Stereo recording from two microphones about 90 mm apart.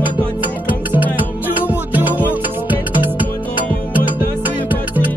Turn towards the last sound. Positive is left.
turn(degrees=-20)  # may be behind; listen again after turning